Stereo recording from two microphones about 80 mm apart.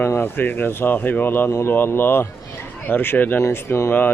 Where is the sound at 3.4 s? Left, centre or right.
Left.